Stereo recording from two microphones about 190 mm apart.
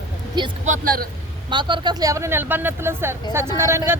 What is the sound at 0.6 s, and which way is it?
Speech, 45° right (ahead or behind).